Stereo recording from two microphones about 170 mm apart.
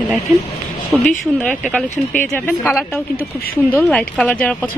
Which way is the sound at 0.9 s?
5° left (ahead or behind).